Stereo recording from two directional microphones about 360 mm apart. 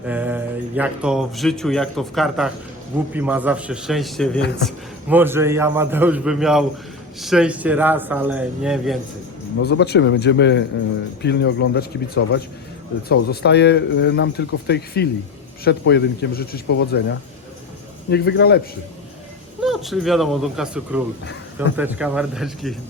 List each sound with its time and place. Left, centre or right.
0.0 s a man's voice: centre
9.6 s speech: left
19.6 s a man's voice: centre